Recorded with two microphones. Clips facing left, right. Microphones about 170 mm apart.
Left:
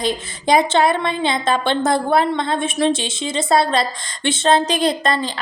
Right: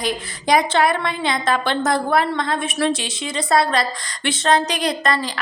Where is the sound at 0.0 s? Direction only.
25° left (ahead or behind).